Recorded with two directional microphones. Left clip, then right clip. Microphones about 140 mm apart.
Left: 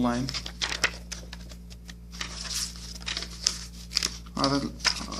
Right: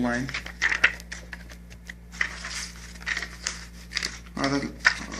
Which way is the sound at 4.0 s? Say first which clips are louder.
Even; 10° left (ahead or behind).